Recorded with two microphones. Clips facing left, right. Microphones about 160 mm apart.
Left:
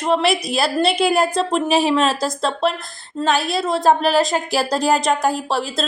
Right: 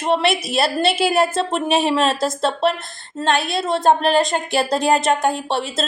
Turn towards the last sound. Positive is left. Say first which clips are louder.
# even
turn(degrees=0)  # may be behind; listen again after turning